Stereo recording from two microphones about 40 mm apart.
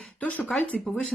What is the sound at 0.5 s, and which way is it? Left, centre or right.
Speech, left.